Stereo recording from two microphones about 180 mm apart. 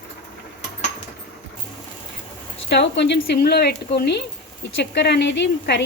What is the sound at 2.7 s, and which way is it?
Speech, 70° left (ahead or behind).